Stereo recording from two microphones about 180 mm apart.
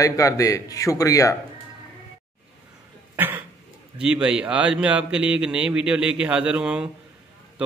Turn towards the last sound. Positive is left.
turn(degrees=-5)  # may be behind; listen again after turning